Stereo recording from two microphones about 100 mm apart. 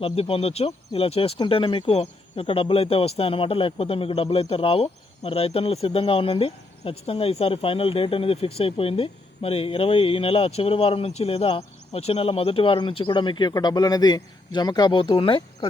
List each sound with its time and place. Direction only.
0.0 s speech: 70° left (ahead or behind)
1.4 s speech: 60° left (ahead or behind)